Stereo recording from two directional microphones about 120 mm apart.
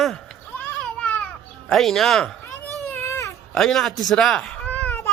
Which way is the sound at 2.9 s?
20° left (ahead or behind).